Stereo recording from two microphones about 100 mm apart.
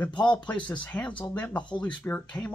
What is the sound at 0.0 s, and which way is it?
Speech, 10° left (ahead or behind).